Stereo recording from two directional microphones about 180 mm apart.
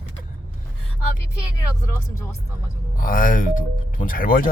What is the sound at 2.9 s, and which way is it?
Speech, 50° left (ahead or behind).